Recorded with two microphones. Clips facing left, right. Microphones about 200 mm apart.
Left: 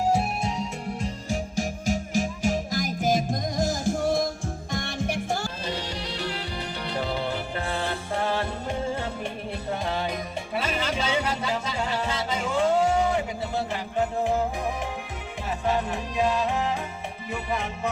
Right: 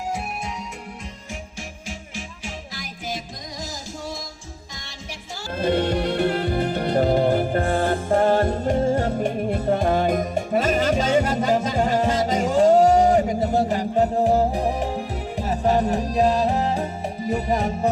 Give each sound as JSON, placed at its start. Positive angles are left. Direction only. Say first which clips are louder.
{"t": 0.1, "sound": "music", "louder": "left 4 dB", "side_deg": 30}
{"t": 5.6, "sound": "music", "louder": "right 11 dB", "side_deg": -55}